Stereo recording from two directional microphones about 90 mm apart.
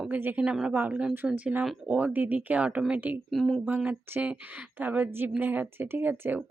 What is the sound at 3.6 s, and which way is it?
A woman's voice, 20° right (ahead or behind).